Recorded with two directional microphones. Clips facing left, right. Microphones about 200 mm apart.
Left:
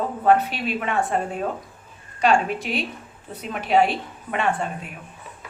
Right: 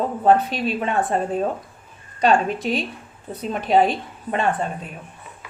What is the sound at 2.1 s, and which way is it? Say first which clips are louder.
A woman's voice: right 2 dB; 35° right (ahead or behind).